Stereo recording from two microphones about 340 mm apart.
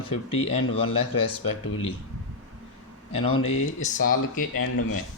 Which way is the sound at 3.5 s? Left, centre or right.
Left.